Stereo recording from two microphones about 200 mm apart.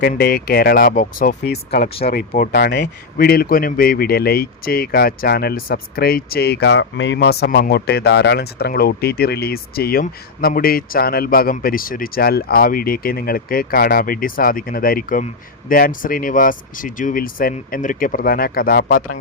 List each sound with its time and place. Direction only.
0.0 s speech: 50° left (ahead or behind)